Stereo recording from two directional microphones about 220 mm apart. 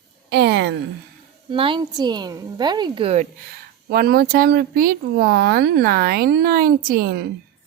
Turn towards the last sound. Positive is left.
turn(degrees=-45)  # may be behind; listen again after turning